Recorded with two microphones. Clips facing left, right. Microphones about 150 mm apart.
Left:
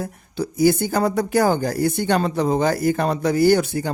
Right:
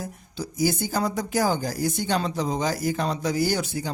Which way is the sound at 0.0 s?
60° left (ahead or behind).